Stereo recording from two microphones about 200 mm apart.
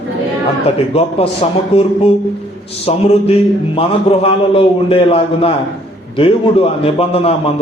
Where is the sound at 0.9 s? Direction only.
30° left (ahead or behind).